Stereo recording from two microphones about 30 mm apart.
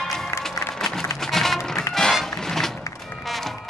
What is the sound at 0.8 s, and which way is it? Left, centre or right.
Music, centre.